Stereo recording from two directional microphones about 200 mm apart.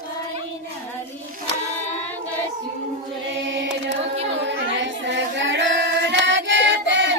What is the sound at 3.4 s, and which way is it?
Music, 65° right (ahead or behind).